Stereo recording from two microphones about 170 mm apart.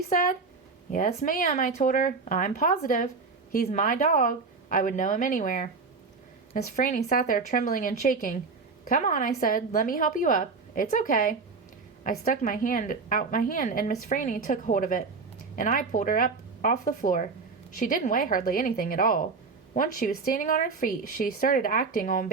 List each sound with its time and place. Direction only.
0.9 s a woman's voice: 50° left (ahead or behind)